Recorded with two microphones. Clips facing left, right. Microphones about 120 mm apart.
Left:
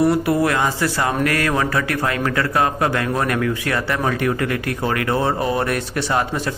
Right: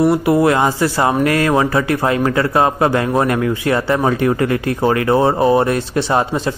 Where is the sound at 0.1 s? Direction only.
20° right (ahead or behind).